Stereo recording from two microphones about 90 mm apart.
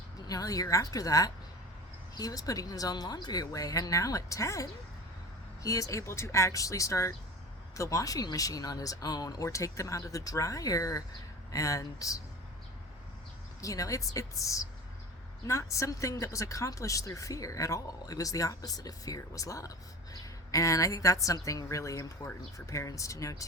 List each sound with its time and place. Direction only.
0.3 s speech: 40° left (ahead or behind)
13.6 s speech: 40° left (ahead or behind)